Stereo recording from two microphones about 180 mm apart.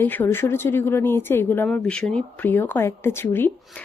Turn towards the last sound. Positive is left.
turn(degrees=10)  # may be behind; listen again after turning